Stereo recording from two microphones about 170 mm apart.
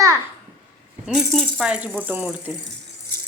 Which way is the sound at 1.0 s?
Centre (ahead or behind).